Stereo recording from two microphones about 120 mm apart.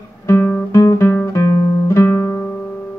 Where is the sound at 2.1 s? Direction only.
20° left (ahead or behind).